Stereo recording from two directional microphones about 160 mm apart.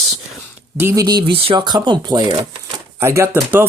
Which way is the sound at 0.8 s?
20° right (ahead or behind).